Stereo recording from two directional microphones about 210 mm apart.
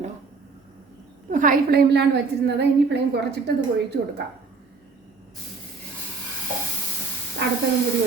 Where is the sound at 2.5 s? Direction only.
55° right (ahead or behind).